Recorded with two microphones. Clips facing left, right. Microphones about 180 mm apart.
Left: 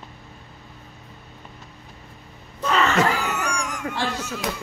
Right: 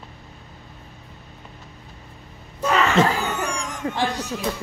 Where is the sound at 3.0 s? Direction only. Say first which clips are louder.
Right 2 dB; 25° right (ahead or behind).